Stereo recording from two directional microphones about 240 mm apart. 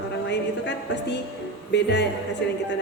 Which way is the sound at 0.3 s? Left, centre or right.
Left.